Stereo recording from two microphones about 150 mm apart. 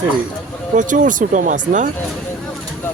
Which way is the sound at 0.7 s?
60° right (ahead or behind).